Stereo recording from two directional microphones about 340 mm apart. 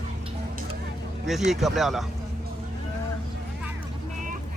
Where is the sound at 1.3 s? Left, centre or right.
Centre.